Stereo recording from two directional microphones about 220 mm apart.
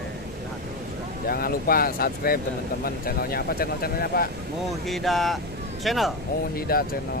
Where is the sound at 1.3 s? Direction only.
40° left (ahead or behind).